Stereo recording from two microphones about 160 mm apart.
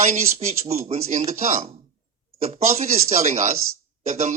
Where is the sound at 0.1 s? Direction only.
40° right (ahead or behind).